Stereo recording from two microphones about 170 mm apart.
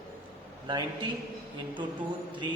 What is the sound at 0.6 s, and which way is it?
Speech, 25° right (ahead or behind).